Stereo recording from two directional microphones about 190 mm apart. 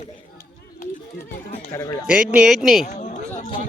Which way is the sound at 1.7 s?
15° left (ahead or behind).